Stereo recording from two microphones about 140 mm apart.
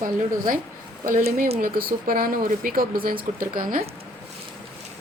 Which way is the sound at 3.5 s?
80° right.